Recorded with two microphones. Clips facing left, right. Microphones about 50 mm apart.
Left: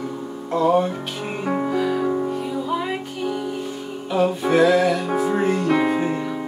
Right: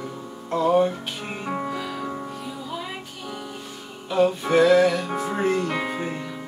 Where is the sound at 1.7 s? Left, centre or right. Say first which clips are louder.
Left 9 dB; left.